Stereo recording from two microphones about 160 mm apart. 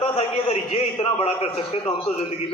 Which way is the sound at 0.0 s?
40° left (ahead or behind).